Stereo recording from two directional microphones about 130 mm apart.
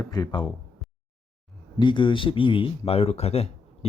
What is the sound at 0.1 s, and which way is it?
Speech, 30° left (ahead or behind).